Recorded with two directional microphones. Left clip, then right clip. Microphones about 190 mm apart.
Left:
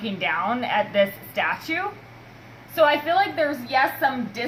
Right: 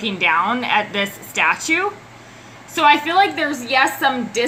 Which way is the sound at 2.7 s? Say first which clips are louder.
Right 5 dB; 20° left (ahead or behind).